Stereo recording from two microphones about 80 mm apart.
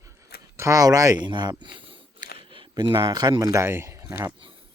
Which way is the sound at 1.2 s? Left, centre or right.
Right.